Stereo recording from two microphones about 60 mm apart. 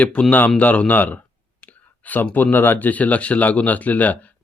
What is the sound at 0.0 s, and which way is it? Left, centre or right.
Speech, left.